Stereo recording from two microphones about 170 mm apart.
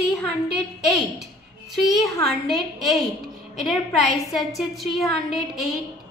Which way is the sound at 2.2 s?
Centre (ahead or behind).